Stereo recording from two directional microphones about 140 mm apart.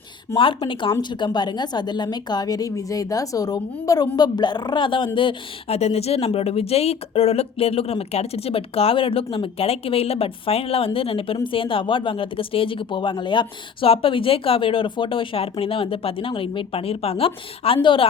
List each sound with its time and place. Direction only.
0.3 s a woman's voice: 35° left (ahead or behind)